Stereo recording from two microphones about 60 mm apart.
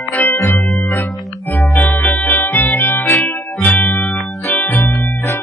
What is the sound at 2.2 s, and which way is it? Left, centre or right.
Music, left.